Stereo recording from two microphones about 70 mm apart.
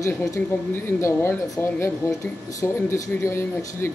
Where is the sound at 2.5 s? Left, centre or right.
Left.